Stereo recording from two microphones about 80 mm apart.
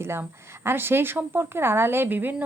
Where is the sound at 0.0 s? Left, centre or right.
Right.